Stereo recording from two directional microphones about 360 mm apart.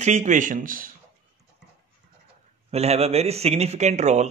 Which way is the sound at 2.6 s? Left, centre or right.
Centre.